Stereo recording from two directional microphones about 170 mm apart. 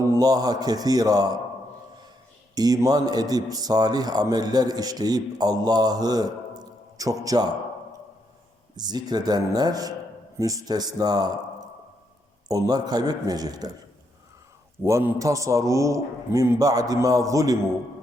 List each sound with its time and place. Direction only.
0.0 s a man's voice: 20° right (ahead or behind)
2.6 s a man's voice: 20° right (ahead or behind)
8.7 s a man's voice: 25° right (ahead or behind)
12.5 s a man's voice: 20° right (ahead or behind)
14.8 s a man's voice: 15° right (ahead or behind)